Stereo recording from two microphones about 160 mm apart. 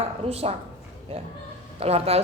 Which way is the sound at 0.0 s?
40° right (ahead or behind).